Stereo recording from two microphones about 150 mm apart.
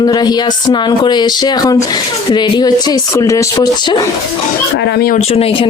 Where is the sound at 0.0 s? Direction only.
30° left (ahead or behind).